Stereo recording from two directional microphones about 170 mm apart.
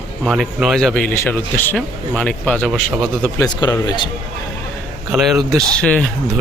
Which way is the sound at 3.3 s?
20° left (ahead or behind).